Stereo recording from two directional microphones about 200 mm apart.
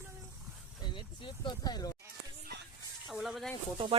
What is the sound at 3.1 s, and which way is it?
Speech, centre (ahead or behind).